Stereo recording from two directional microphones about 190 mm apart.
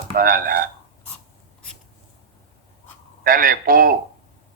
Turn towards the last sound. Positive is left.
turn(degrees=-50)  # may be behind; listen again after turning